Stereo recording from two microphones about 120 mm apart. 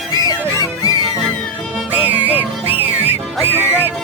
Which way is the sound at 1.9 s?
15° right (ahead or behind).